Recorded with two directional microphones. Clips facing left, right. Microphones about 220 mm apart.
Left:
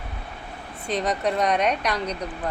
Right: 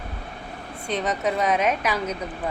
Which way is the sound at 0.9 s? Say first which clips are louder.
Left 1 dB; centre (ahead or behind).